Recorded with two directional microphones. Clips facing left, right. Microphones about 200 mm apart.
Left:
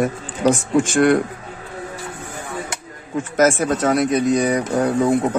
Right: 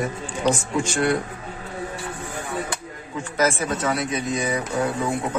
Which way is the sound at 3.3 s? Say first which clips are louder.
Left 6 dB; 45° left (ahead or behind).